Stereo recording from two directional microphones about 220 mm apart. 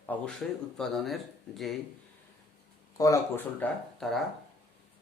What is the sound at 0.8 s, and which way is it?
Speech, centre (ahead or behind).